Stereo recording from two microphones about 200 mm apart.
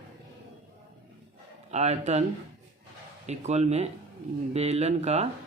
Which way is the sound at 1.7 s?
35° right (ahead or behind).